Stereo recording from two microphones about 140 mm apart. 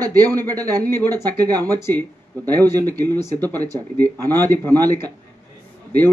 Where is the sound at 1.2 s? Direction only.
25° right (ahead or behind).